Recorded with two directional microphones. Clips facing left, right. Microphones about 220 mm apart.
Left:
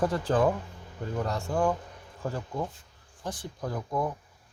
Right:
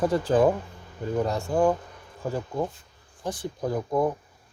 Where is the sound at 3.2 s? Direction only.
10° right (ahead or behind).